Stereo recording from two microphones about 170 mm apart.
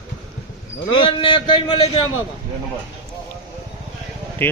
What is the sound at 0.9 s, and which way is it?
Speech, 30° left (ahead or behind).